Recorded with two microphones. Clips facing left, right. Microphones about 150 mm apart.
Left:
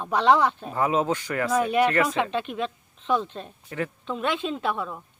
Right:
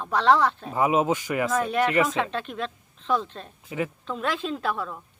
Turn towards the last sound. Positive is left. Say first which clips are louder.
# left 1 dB
turn(degrees=0)  # may be behind; listen again after turning